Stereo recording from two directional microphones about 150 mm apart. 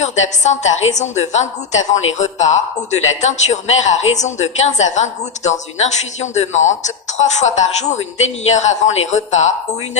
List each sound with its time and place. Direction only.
0.0 s a woman's voice: 50° left (ahead or behind)